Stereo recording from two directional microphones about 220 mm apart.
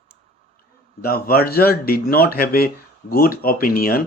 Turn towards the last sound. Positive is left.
turn(degrees=40)  # may be behind; listen again after turning